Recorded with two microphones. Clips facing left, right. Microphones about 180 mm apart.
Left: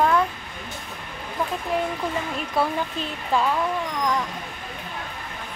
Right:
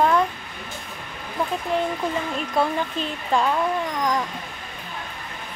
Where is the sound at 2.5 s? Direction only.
5° left (ahead or behind).